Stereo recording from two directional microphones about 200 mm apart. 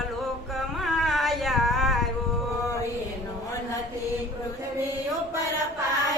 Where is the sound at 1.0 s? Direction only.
Centre (ahead or behind).